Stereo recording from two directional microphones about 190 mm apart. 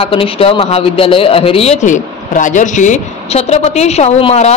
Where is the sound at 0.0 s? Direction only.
30° left (ahead or behind).